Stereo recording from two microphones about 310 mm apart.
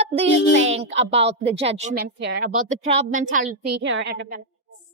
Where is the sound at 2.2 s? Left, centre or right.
Right.